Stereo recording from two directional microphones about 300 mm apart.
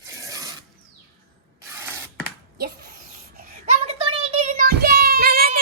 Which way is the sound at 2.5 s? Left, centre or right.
Right.